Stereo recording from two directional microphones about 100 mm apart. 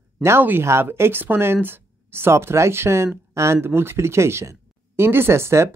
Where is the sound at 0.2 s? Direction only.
25° right (ahead or behind).